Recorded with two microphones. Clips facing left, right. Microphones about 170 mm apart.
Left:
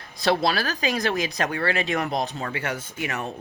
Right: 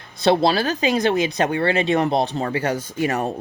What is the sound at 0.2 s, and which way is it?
Speech, 25° right (ahead or behind).